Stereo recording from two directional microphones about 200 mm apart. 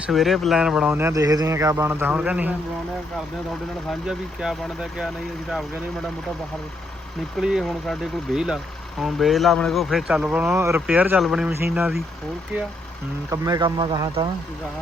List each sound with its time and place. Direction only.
0.0 s speech: centre (ahead or behind)
4.0 s a man's voice: 5° right (ahead or behind)
7.3 s a man's voice: centre (ahead or behind)
13.3 s speech: 20° right (ahead or behind)